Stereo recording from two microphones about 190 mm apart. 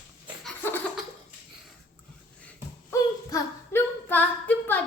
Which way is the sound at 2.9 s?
20° left (ahead or behind).